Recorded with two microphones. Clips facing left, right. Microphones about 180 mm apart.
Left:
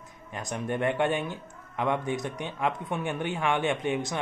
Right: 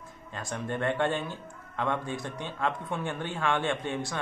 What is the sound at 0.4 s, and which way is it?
Speech, 15° left (ahead or behind).